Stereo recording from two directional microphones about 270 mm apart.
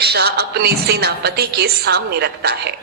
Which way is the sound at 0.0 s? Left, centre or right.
Right.